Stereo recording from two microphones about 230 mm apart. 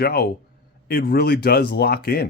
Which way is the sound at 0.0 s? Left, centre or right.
Left.